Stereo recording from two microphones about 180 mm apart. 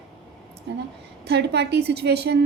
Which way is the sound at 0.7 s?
70° right (ahead or behind).